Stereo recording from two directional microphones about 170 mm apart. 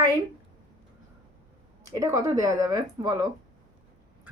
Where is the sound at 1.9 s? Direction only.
20° right (ahead or behind).